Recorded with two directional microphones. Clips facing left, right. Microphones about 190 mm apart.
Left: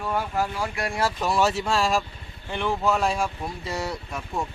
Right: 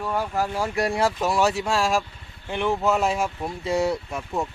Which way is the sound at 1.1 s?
15° right (ahead or behind).